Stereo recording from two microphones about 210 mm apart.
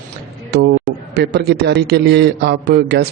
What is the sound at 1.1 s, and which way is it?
A man's voice, 50° right (ahead or behind).